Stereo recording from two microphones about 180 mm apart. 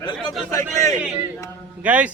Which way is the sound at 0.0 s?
25° left (ahead or behind).